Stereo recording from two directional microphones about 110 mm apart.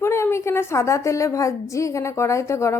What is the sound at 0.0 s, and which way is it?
A woman's voice, 25° left (ahead or behind).